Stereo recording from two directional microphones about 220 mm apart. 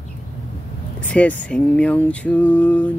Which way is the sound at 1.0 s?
5° left (ahead or behind).